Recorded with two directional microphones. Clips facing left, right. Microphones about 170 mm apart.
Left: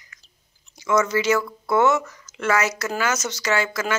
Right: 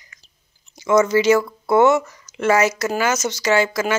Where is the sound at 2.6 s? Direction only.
15° right (ahead or behind).